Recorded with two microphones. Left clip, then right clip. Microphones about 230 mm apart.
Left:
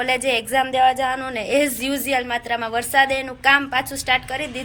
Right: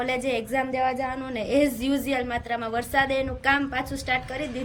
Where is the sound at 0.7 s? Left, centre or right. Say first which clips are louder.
Left 11 dB; left.